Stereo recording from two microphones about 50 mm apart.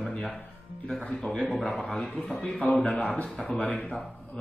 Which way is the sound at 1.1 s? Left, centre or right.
Centre.